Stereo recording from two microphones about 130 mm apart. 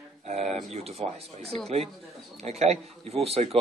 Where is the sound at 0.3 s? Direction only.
55° right (ahead or behind).